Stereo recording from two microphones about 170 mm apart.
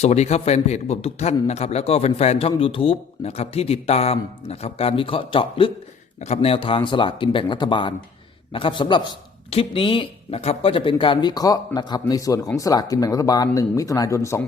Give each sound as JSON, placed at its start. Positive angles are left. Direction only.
{"t": 0.0, "sound": "a man's voice", "side_deg": 40}